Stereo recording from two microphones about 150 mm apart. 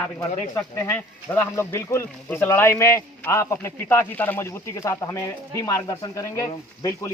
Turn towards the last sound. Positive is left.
turn(degrees=20)  # may be behind; listen again after turning